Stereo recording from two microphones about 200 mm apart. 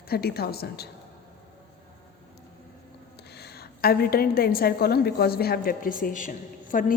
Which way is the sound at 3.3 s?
55° left (ahead or behind).